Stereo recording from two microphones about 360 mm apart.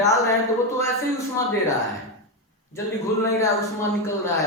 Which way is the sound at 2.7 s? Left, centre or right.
Centre.